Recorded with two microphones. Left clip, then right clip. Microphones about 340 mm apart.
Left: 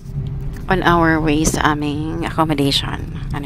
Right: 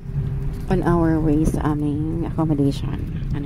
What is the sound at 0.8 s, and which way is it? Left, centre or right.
A woman's voice, left.